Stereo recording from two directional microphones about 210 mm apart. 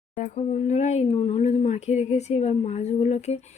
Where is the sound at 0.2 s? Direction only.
35° left (ahead or behind).